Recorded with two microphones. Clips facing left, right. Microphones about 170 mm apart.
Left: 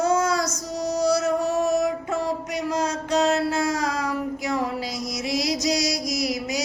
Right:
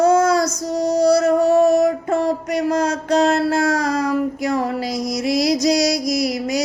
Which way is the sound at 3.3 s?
60° right (ahead or behind).